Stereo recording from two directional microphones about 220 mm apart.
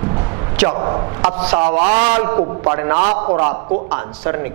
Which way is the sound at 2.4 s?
15° right (ahead or behind).